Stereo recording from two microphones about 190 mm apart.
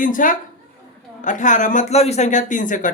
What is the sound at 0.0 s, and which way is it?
Speech, 45° left (ahead or behind).